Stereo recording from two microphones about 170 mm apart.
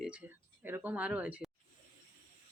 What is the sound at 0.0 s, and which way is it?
Speech, 10° right (ahead or behind).